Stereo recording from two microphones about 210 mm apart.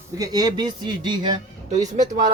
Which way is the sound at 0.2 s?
20° right (ahead or behind).